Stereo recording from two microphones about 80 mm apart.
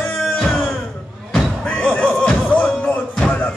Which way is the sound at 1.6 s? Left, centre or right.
Left.